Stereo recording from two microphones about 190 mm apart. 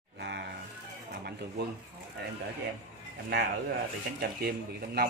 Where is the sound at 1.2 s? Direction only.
60° right (ahead or behind).